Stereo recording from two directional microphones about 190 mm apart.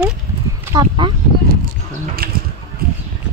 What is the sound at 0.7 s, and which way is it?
Speech, 25° right (ahead or behind).